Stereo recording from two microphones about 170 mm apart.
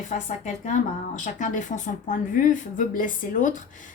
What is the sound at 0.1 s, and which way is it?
A woman's voice, 45° left (ahead or behind).